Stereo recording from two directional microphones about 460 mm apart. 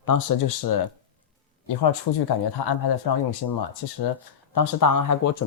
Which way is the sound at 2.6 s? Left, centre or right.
Left.